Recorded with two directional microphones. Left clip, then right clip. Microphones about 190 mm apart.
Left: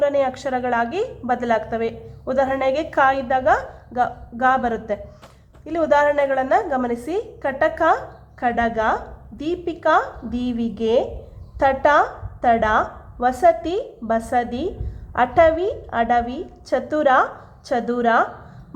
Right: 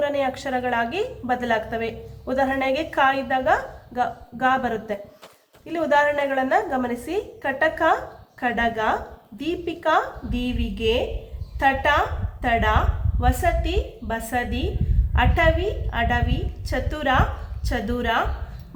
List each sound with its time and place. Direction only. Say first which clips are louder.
0.0 s a woman's voice: left 4 dB; 45° left (ahead or behind)